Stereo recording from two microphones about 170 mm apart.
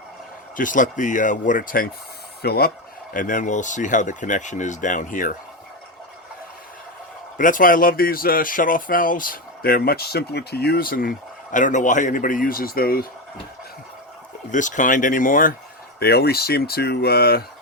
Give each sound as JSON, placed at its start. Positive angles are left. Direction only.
{"t": 0.5, "sound": "speech", "side_deg": 50}
{"t": 2.4, "sound": "speech", "side_deg": 70}
{"t": 7.3, "sound": "speech", "side_deg": 50}
{"t": 11.5, "sound": "speech", "side_deg": 45}
{"t": 14.5, "sound": "speech", "side_deg": 50}
{"t": 16.0, "sound": "speech", "side_deg": 65}